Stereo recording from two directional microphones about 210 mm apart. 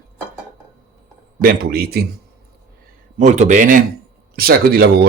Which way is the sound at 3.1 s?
35° right (ahead or behind).